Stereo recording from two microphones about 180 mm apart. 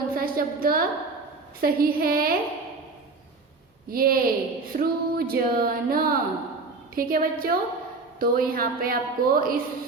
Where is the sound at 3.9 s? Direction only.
55° right (ahead or behind).